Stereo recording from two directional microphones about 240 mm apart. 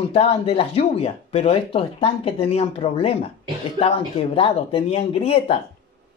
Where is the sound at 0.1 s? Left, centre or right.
Left.